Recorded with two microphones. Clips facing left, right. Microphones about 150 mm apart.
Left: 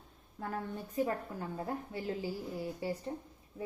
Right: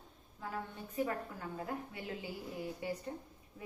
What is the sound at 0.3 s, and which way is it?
Speech, 50° left (ahead or behind).